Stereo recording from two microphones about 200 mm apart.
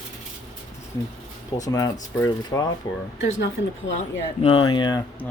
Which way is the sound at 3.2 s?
70° left (ahead or behind).